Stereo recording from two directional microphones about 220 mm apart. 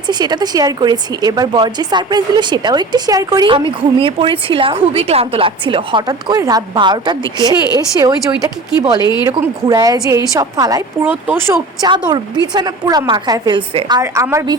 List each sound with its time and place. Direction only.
0.1 s a woman's voice: 20° right (ahead or behind)
7.5 s speech: 20° left (ahead or behind)
7.9 s a woman's voice: 15° right (ahead or behind)